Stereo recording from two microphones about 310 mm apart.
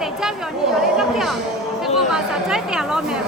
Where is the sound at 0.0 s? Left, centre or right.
Centre.